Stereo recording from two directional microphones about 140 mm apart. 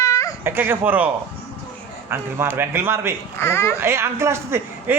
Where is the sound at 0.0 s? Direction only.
25° left (ahead or behind).